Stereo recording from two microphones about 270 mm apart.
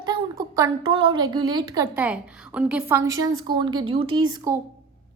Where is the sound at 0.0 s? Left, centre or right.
Centre.